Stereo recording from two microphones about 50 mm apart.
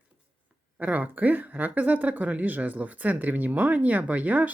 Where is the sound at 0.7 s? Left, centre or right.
Right.